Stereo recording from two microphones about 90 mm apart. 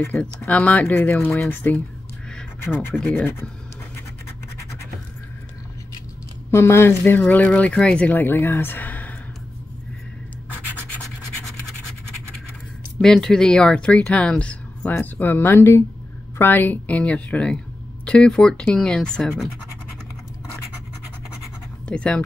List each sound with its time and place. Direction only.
0.4 s speech: 15° left (ahead or behind)
6.5 s speech: 25° left (ahead or behind); by 8.2 s 10° left (ahead or behind)
8.2 s speech: 25° left (ahead or behind)
13.0 s speech: 5° left (ahead or behind)
21.8 s speech: 10° left (ahead or behind)